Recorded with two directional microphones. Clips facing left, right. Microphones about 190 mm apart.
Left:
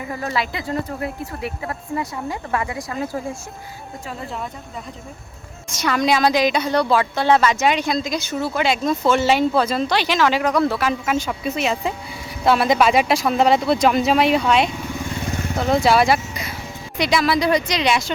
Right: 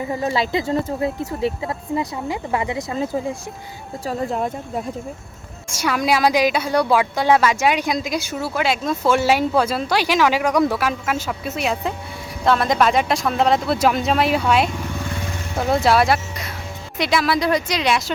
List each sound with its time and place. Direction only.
0.1 s speech: 25° right (ahead or behind)
1.6 s speech: 15° right (ahead or behind)
4.0 s speech: 40° right (ahead or behind)
5.7 s a woman's voice: 10° right (ahead or behind)